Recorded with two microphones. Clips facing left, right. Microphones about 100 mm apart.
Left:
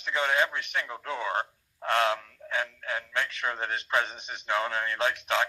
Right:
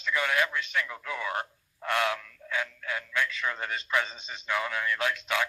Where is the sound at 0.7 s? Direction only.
25° left (ahead or behind).